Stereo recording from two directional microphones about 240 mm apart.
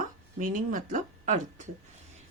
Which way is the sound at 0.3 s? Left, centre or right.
Right.